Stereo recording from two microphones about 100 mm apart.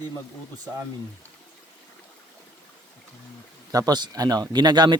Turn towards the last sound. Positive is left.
turn(degrees=-45)  # may be behind; listen again after turning